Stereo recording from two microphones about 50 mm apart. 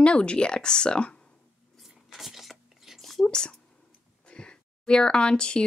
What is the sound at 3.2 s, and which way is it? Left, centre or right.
A woman's voice, centre.